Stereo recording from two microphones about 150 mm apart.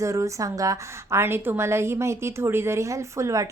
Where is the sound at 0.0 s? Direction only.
20° right (ahead or behind).